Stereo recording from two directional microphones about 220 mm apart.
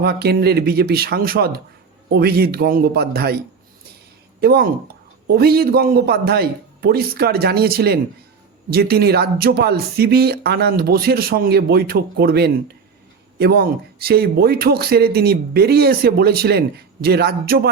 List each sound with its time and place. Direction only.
0.0 s speech: 45° right (ahead or behind)